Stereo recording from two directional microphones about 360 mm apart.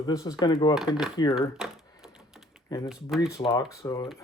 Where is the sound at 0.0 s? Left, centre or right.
Centre.